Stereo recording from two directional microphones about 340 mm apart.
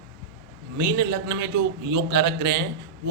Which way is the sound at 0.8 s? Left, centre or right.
Right.